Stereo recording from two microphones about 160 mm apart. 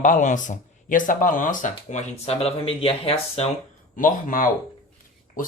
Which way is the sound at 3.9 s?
55° left (ahead or behind).